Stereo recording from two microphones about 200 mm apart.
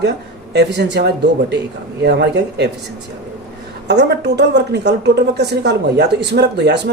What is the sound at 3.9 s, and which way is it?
A woman's voice, 60° right (ahead or behind).